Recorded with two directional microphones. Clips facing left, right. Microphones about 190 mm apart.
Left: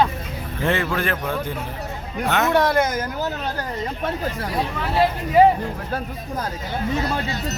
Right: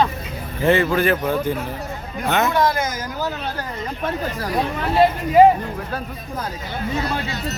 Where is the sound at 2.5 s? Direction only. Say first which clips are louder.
Left 2 dB; 65° left (ahead or behind).